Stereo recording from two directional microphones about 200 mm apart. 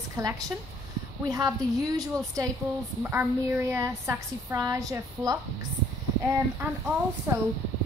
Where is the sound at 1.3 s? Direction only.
20° right (ahead or behind).